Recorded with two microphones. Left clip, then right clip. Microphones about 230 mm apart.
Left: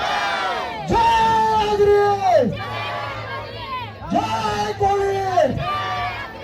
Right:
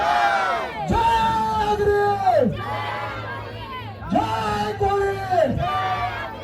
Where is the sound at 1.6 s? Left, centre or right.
Left.